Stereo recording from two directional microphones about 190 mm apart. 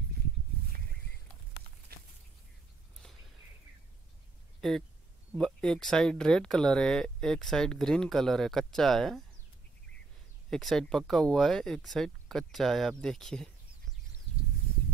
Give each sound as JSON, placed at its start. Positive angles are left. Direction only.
{"t": 1.9, "sound": "a sound", "side_deg": -55}
{"t": 4.6, "sound": "speech", "side_deg": 0}
{"t": 10.5, "sound": "speech", "side_deg": 0}